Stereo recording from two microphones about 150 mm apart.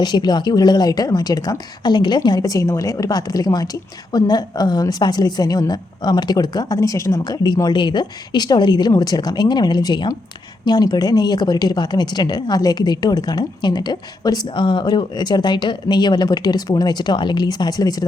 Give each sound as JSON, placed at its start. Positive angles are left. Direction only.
{"t": 0.0, "sound": "speech", "side_deg": 30}